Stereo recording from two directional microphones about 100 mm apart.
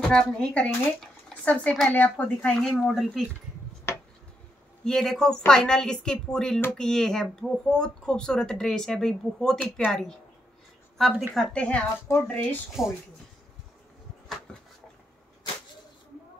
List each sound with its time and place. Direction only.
0.1 s speech: 5° left (ahead or behind)
2.2 s speech: 5° left (ahead or behind)
4.8 s speech: 5° left (ahead or behind)
12.8 s speech: 5° right (ahead or behind)
14.5 s a sound: 10° left (ahead or behind)